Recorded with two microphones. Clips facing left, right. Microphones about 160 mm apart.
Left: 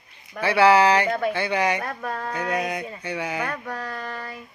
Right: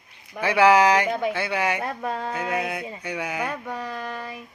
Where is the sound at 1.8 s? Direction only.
20° right (ahead or behind).